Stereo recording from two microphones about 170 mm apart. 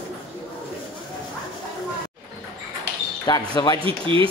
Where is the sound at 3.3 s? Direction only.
20° left (ahead or behind).